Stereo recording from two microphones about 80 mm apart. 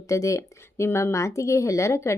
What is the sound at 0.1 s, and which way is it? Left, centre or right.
Speech, left.